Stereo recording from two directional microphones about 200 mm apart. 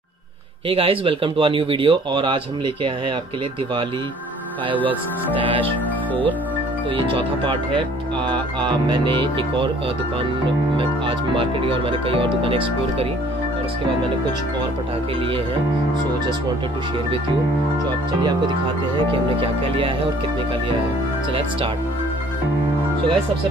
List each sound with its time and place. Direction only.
0.7 s speech: 30° right (ahead or behind)
4.7 s speech: 10° left (ahead or behind)
7.0 s speech: 25° right (ahead or behind)
10.8 s speech: 25° right (ahead or behind)
19.2 s speech: 25° right (ahead or behind)